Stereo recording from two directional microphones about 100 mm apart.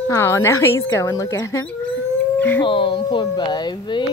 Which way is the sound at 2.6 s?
55° left (ahead or behind).